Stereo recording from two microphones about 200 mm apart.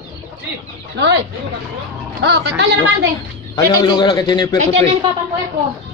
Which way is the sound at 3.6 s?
20° left (ahead or behind).